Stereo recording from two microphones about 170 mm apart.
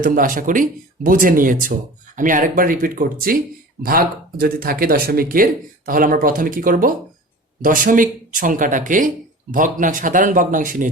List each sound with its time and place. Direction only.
0.0 s speech: 55° right (ahead or behind)